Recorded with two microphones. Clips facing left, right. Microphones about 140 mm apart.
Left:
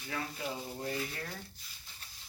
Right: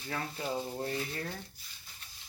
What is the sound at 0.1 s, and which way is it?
Speech, 35° right (ahead or behind).